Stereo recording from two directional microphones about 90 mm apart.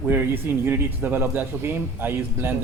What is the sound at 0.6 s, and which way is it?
Speech, 20° right (ahead or behind).